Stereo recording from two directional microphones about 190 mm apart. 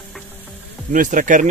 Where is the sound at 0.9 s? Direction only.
45° right (ahead or behind).